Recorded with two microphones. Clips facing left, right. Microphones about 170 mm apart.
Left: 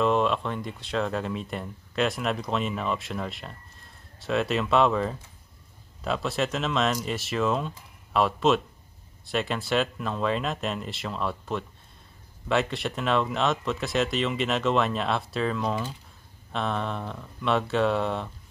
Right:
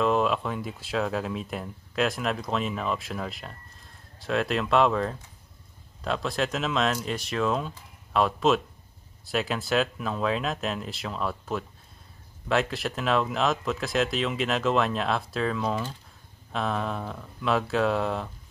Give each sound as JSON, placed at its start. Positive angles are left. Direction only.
{"t": 0.0, "sound": "speech", "side_deg": 0}